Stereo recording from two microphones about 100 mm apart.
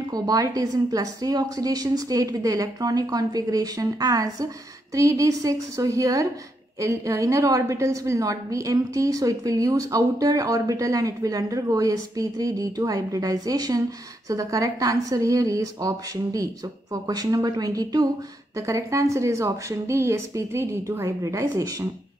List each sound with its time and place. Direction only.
0.1 s a woman's voice: 40° right (ahead or behind)